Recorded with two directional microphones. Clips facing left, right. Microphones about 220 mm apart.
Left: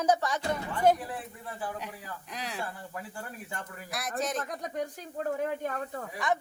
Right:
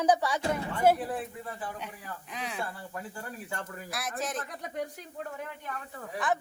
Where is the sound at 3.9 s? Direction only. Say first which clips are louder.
Left 3 dB; centre (ahead or behind).